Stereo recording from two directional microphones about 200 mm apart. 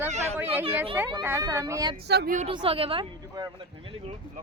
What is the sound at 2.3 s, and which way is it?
Speech, 30° right (ahead or behind).